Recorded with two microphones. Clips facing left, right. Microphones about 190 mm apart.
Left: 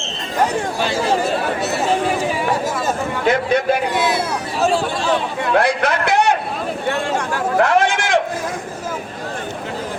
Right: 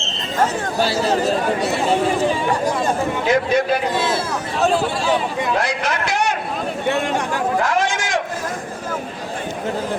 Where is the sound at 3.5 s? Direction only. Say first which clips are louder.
Right 1 dB; 60° left (ahead or behind).